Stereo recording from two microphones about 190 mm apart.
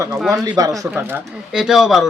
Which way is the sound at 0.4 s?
20° right (ahead or behind).